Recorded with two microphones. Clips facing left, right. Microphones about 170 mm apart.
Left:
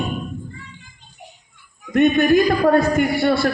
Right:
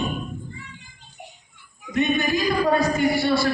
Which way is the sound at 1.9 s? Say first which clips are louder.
Left 8 dB; 60° left (ahead or behind).